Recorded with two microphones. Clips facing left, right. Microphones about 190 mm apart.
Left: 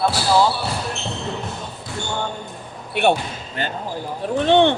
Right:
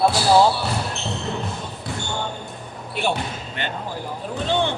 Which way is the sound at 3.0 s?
65° left (ahead or behind).